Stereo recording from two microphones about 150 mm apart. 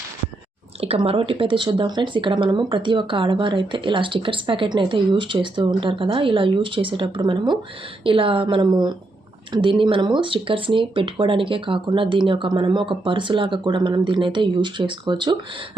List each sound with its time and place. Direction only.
0.8 s speech: 40° right (ahead or behind)